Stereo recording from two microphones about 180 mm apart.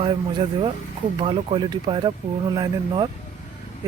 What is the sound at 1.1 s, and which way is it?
Speech, 25° right (ahead or behind).